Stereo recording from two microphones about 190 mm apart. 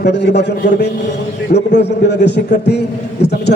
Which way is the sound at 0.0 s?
65° left (ahead or behind).